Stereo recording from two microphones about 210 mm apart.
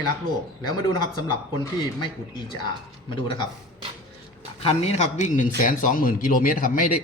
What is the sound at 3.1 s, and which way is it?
Speech, 25° left (ahead or behind).